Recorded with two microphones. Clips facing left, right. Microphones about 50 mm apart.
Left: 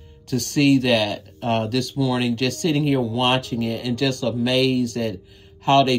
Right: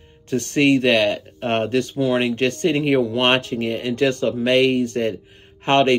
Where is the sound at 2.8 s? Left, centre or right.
Right.